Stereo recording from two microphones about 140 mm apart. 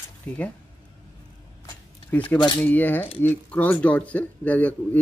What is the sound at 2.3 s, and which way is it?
Speech, 30° left (ahead or behind).